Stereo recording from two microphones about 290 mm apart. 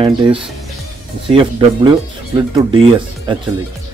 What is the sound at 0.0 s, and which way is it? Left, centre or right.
Speech, centre.